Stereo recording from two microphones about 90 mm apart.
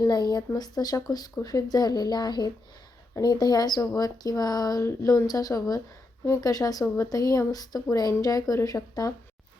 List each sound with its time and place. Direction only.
0.0 s speech: 50° left (ahead or behind)